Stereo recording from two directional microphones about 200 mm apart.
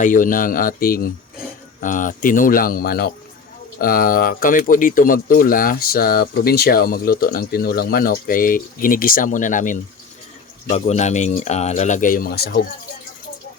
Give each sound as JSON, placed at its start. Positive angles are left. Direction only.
{"t": 0.0, "sound": "speech", "side_deg": 40}